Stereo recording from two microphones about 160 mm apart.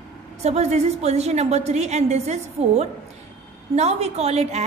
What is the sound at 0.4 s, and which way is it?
A woman's voice, 45° right (ahead or behind).